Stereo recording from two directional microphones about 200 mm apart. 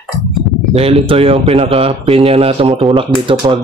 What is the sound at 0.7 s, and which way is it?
Speech, 30° right (ahead or behind).